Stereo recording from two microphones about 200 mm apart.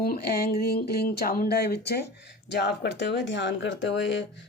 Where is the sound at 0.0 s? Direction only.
50° left (ahead or behind).